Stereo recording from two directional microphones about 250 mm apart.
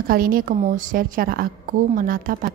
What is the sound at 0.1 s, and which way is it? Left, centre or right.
A woman's voice, right.